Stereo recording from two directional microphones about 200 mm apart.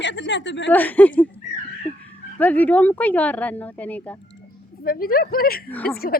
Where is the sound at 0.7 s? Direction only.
10° left (ahead or behind).